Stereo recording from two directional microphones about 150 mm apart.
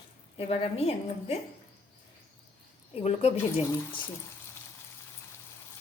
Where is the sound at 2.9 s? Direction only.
45° left (ahead or behind).